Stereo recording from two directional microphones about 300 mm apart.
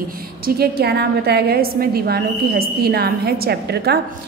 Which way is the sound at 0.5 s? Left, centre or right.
Right.